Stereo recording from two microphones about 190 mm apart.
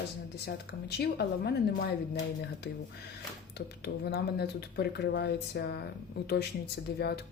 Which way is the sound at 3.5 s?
60° left (ahead or behind).